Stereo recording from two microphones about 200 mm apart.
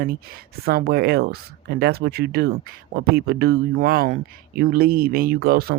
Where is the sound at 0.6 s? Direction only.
50° right (ahead or behind).